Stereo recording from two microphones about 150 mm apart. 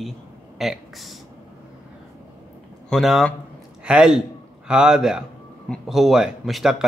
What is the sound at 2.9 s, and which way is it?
A man's voice, centre (ahead or behind).